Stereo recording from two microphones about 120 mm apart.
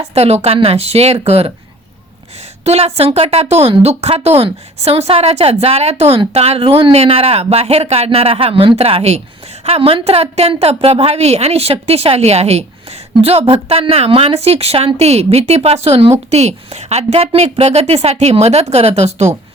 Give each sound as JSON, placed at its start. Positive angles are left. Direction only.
{"t": 0.0, "sound": "speech", "side_deg": -60}
{"t": 2.6, "sound": "speech", "side_deg": -60}
{"t": 16.3, "sound": "speech", "side_deg": -65}